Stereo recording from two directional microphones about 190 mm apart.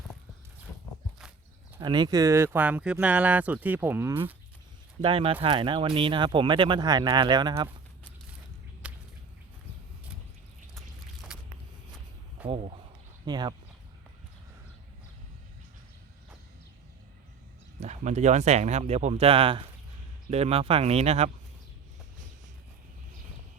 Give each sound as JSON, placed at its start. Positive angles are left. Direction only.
{"t": 1.8, "sound": "speech", "side_deg": -25}
{"t": 5.0, "sound": "speech", "side_deg": -30}
{"t": 8.8, "sound": "a sound", "side_deg": -5}
{"t": 10.8, "sound": "a sound", "side_deg": 0}
{"t": 12.5, "sound": "speech", "side_deg": -35}
{"t": 13.2, "sound": "speech", "side_deg": -20}
{"t": 17.7, "sound": "speech", "side_deg": -35}